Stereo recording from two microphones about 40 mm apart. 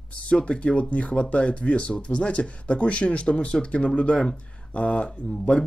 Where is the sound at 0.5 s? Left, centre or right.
Left.